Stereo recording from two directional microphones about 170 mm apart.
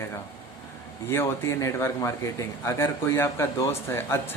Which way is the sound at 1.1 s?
15° left (ahead or behind).